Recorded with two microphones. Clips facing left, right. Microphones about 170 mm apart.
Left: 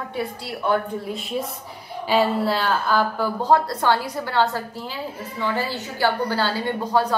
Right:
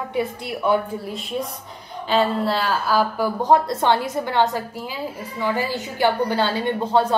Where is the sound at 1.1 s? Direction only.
Centre (ahead or behind).